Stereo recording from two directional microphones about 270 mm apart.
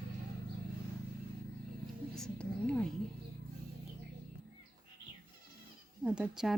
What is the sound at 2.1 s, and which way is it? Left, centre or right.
Speech, centre.